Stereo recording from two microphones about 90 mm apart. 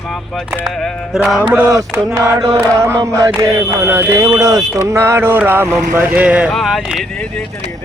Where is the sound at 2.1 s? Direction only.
40° right (ahead or behind).